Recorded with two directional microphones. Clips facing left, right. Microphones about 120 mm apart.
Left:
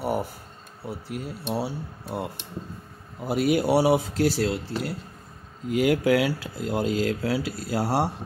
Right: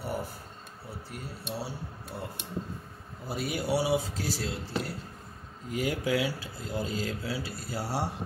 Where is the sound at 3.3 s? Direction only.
90° left.